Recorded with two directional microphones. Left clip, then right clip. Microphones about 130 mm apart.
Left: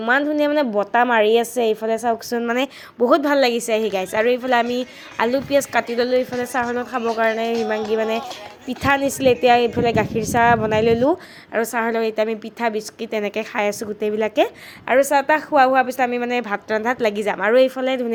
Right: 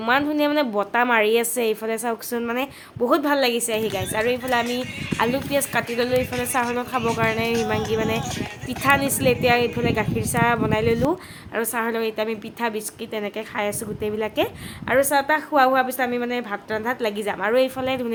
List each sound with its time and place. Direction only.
0.0 s a woman's voice: 25° left (ahead or behind)
2.5 s a woman's voice: 40° left (ahead or behind)